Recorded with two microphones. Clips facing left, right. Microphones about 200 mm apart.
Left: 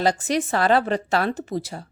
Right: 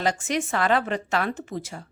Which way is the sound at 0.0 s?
35° left (ahead or behind).